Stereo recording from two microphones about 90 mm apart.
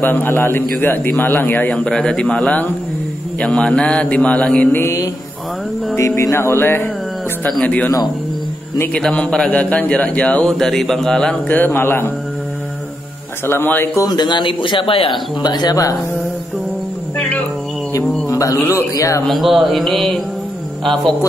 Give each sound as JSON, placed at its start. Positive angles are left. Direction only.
{"t": 0.0, "sound": "a man's voice", "side_deg": 20}
{"t": 1.9, "sound": "a man's voice", "side_deg": 10}
{"t": 4.8, "sound": "mantra", "side_deg": 40}
{"t": 5.9, "sound": "a man's voice", "side_deg": 35}
{"t": 7.4, "sound": "a man's voice", "side_deg": 15}
{"t": 8.9, "sound": "a man's voice", "side_deg": 10}
{"t": 11.4, "sound": "a man's voice", "side_deg": 20}
{"t": 13.5, "sound": "a man's voice", "side_deg": 25}
{"t": 14.0, "sound": "speech", "side_deg": 55}
{"t": 15.4, "sound": "speech", "side_deg": 50}
{"t": 17.2, "sound": "a sound", "side_deg": 15}
{"t": 18.3, "sound": "a sound", "side_deg": 35}
{"t": 18.7, "sound": "a man's voice", "side_deg": 35}
{"t": 19.2, "sound": "a man's voice", "side_deg": 0}